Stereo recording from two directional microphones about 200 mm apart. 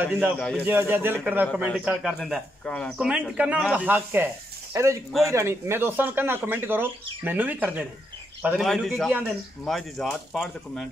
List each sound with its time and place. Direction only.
0.0 s a man's voice: 10° right (ahead or behind)